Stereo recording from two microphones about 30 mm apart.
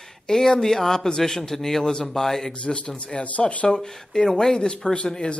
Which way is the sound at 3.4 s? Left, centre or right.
Left.